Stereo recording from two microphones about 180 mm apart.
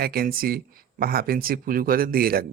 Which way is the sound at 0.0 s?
55° right (ahead or behind).